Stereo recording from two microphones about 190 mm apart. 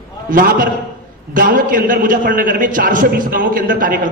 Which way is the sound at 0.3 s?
45° right (ahead or behind).